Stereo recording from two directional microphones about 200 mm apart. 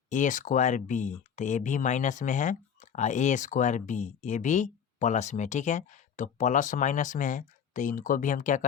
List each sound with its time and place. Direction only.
0.1 s speech: 40° left (ahead or behind)